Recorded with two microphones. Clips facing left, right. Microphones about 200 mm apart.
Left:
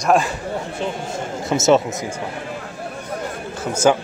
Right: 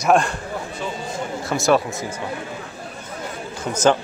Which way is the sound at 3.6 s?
10° left (ahead or behind).